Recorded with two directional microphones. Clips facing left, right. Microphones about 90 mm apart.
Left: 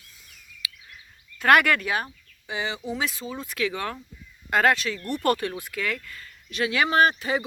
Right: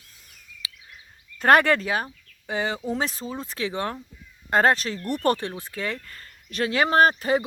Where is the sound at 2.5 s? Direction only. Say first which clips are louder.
Right 3 dB; 45° right (ahead or behind).